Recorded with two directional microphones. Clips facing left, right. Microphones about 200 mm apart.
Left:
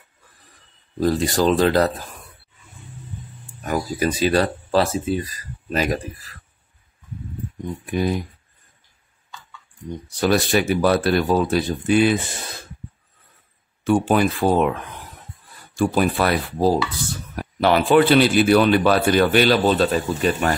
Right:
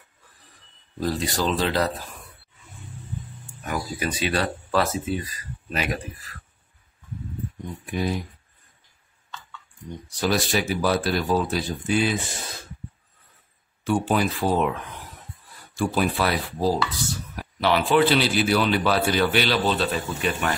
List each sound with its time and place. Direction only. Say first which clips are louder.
1.0 s a man's voice: left 7 dB; 50° left (ahead or behind)
3.6 s speech: left 6 dB; 40° left (ahead or behind)
10.2 s speech: left 5 dB; 60° left (ahead or behind)
13.8 s a man's voice: left 5 dB; 55° left (ahead or behind); by 20.5 s 40° left (ahead or behind)